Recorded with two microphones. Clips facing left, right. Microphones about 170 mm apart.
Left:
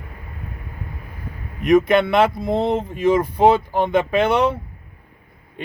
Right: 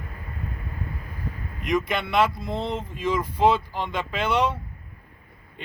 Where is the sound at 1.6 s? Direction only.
55° left (ahead or behind).